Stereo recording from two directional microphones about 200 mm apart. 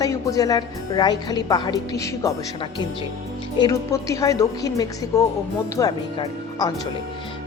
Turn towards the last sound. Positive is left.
turn(degrees=20)  # may be behind; listen again after turning